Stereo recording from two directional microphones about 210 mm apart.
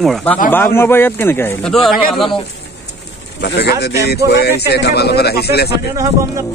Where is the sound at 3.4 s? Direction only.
55° left (ahead or behind).